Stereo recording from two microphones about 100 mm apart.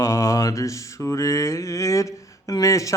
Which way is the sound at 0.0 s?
30° left (ahead or behind).